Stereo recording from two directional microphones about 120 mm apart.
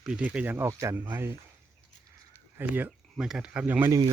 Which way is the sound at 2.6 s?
15° right (ahead or behind).